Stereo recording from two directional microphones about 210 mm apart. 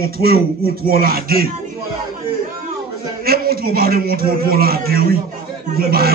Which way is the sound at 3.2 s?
45° right (ahead or behind).